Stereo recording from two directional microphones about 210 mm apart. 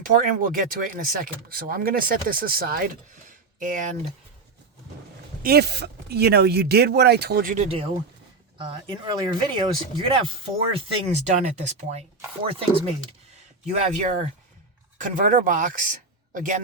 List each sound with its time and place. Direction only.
0.0 s speech: 40° right (ahead or behind)
5.4 s speech: 45° right (ahead or behind)